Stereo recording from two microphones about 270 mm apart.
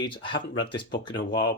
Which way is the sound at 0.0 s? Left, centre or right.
Centre.